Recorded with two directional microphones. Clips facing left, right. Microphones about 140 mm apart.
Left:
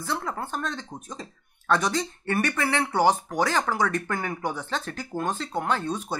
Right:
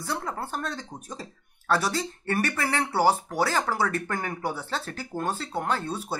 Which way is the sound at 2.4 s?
40° right (ahead or behind).